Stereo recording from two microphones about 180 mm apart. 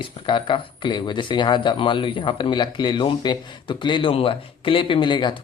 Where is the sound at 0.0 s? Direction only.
25° left (ahead or behind).